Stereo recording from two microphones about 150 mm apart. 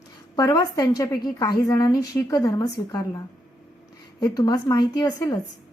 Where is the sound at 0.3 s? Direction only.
25° left (ahead or behind).